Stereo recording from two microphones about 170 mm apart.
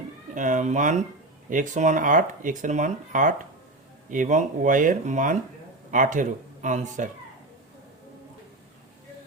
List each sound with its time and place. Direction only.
0.3 s speech: 45° right (ahead or behind)